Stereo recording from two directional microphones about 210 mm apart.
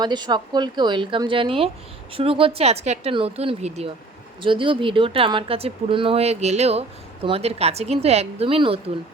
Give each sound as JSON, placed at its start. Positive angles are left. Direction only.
{"t": 0.0, "sound": "speech", "side_deg": -20}